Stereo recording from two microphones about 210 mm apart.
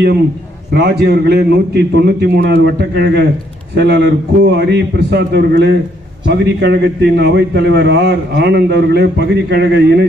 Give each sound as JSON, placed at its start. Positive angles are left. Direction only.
{"t": 0.7, "sound": "a man's voice", "side_deg": -50}